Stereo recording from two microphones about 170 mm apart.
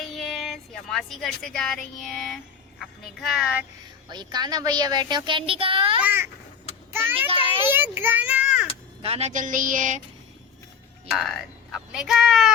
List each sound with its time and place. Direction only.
0.1 s speech: centre (ahead or behind)
4.1 s a child's voice: 25° right (ahead or behind)
6.0 s babbling: 10° right (ahead or behind)
7.7 s a child's voice: 15° right (ahead or behind)
9.0 s a woman's voice: 35° right (ahead or behind)
11.2 s speech: centre (ahead or behind)